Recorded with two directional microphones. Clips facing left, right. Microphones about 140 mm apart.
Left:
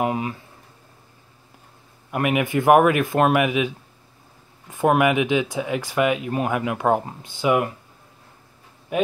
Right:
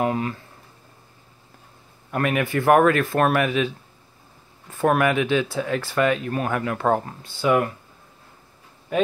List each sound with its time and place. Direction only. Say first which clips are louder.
0.0 s speech: even; 15° left (ahead or behind)
2.0 s speech: left 1 dB; 15° left (ahead or behind)
8.9 s a man's voice: right 1 dB; 10° left (ahead or behind)